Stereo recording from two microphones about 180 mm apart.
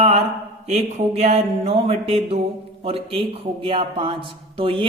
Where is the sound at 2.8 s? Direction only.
30° right (ahead or behind).